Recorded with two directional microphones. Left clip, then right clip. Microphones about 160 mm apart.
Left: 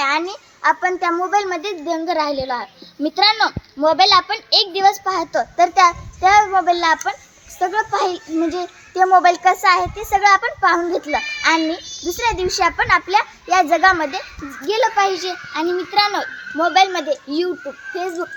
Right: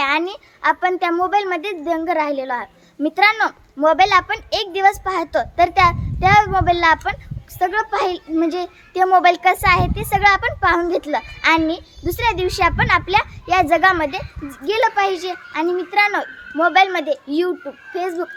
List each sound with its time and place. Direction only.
0.0 s a sound: 35° right (ahead or behind)
0.6 s a child's voice: 35° right (ahead or behind)
8.4 s child singing: 5° right (ahead or behind)
9.0 s a child's voice: 35° right (ahead or behind)
9.8 s a child's voice: 10° right (ahead or behind)
10.1 s a child's voice: 35° right (ahead or behind)
15.6 s a child's voice: centre (ahead or behind)
15.9 s a child's voice: 25° right (ahead or behind)
16.7 s a child's voice: 5° right (ahead or behind)